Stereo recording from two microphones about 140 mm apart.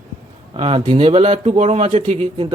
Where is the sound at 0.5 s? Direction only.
40° right (ahead or behind).